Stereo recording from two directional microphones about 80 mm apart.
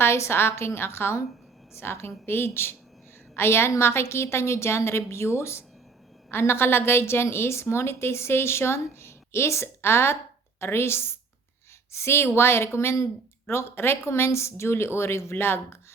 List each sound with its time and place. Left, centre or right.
0.0 s a woman's voice: left